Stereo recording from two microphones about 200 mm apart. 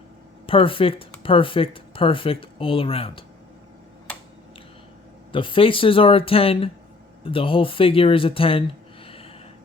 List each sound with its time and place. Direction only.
0.4 s speech: 25° left (ahead or behind)
5.3 s speech: 25° left (ahead or behind)
9.0 s a sound: 30° left (ahead or behind)